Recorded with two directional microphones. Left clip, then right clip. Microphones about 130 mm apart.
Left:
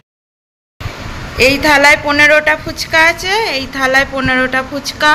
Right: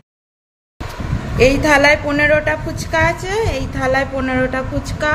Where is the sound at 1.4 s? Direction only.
5° right (ahead or behind).